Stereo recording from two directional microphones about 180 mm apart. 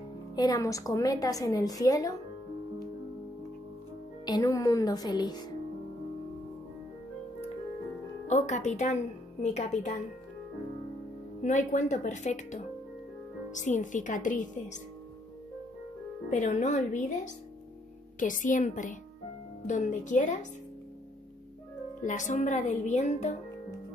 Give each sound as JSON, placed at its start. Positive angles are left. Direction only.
{"t": 0.4, "sound": "a woman's voice", "side_deg": 20}
{"t": 4.3, "sound": "a woman's voice", "side_deg": 20}
{"t": 8.3, "sound": "a woman's voice", "side_deg": 40}
{"t": 11.4, "sound": "speech", "side_deg": 45}
{"t": 16.3, "sound": "speech", "side_deg": 45}
{"t": 22.0, "sound": "a woman's voice", "side_deg": 45}